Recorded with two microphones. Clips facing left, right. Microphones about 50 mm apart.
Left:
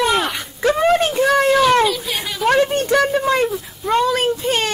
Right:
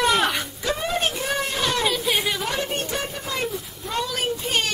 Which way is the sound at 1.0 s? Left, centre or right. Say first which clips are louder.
Left 10 dB; left.